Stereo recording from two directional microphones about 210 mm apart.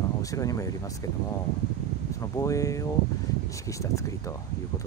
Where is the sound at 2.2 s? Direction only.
15° left (ahead or behind).